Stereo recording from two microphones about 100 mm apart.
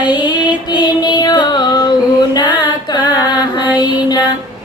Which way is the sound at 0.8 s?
45° left (ahead or behind).